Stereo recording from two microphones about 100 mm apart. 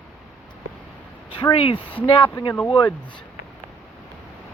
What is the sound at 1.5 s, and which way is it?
Speech, 65° left (ahead or behind).